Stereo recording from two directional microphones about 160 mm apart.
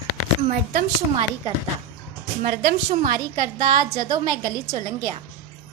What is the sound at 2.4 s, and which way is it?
A woman's voice, 60° right (ahead or behind).